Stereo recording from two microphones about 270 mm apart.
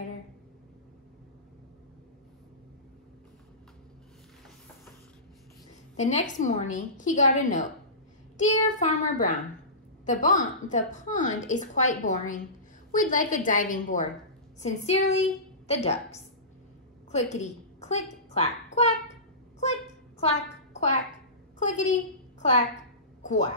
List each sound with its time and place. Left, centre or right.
5.9 s a woman's voice: left
8.7 s a woman's voice: left
19.6 s a sound: left
21.5 s a woman's voice: left
23.2 s speech: left